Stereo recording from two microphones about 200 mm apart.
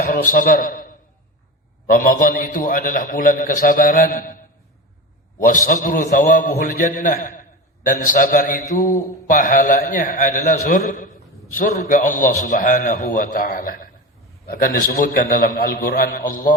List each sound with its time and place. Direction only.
0.0 s a man's voice: 45° left (ahead or behind)